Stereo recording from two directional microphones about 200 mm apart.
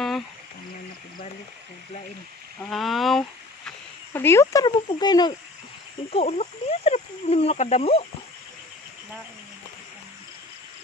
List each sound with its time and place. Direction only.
2.6 s speech: centre (ahead or behind)
4.1 s speech: 10° left (ahead or behind)
6.0 s speech: 30° left (ahead or behind)